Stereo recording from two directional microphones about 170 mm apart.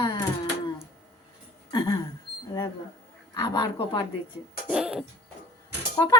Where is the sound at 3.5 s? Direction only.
25° left (ahead or behind).